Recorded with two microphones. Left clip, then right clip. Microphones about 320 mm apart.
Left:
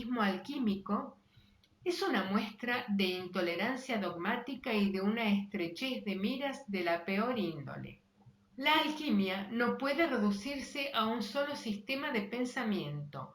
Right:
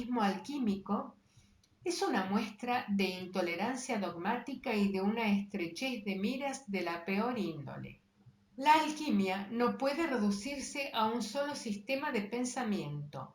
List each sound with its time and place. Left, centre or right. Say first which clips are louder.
0.1 s speech: even; centre
8.5 s speech: right 3 dB; centre